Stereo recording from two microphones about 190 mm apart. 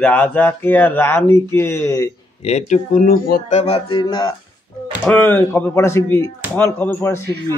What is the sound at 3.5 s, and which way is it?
Speech, 30° left (ahead or behind).